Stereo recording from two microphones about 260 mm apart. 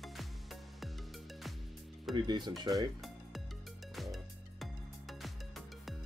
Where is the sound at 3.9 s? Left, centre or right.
Centre.